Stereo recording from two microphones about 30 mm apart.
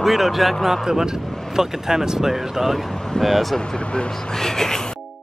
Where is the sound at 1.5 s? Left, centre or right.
Centre.